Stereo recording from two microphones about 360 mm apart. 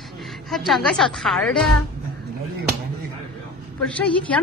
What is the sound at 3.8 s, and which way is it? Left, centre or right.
Speech, centre.